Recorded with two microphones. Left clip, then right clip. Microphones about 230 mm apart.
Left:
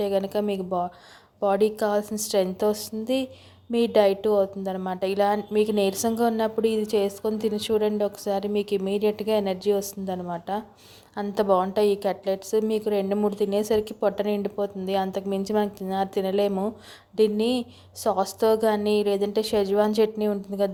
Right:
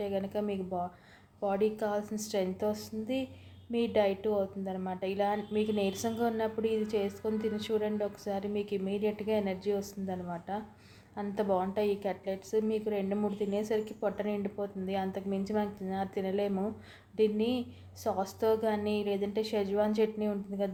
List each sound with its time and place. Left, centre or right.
0.0 s a woman's voice: left